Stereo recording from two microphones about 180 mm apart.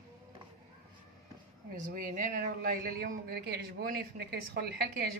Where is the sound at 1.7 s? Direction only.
50° right (ahead or behind).